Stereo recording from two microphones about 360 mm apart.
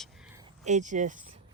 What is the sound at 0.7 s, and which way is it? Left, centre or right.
Speech, centre.